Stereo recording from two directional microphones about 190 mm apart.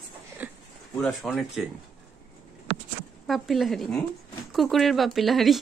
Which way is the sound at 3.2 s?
Centre (ahead or behind).